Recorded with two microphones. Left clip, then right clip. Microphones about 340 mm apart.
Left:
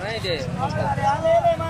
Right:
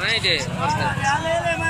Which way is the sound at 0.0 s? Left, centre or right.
Left.